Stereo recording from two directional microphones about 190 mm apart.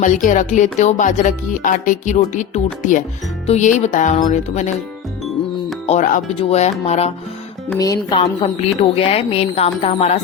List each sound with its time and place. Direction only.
0.0 s speech: 40° left (ahead or behind)
5.8 s speech: 40° left (ahead or behind)
7.8 s speech: 20° left (ahead or behind)
9.0 s speech: 30° left (ahead or behind)